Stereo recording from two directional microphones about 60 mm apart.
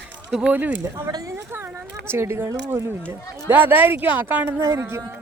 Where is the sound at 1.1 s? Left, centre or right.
Right.